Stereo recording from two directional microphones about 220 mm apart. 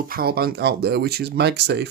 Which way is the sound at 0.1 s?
40° right (ahead or behind).